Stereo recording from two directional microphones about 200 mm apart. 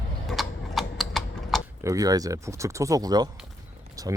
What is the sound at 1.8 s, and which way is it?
Speech, 15° right (ahead or behind).